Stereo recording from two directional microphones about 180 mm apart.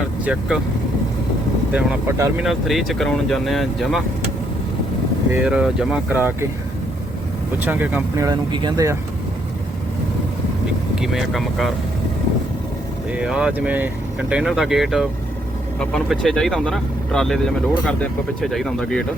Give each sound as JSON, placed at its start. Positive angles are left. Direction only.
{"t": 0.3, "sound": "speech", "side_deg": -5}
{"t": 1.7, "sound": "speech", "side_deg": -10}
{"t": 2.4, "sound": "speech", "side_deg": 0}
{"t": 5.3, "sound": "speech", "side_deg": -5}
{"t": 7.6, "sound": "speech", "side_deg": -10}
{"t": 10.9, "sound": "speech", "side_deg": 0}
{"t": 13.1, "sound": "speech", "side_deg": -5}